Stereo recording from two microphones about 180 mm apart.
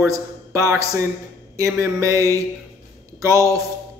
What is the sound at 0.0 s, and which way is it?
A man's voice, 15° right (ahead or behind).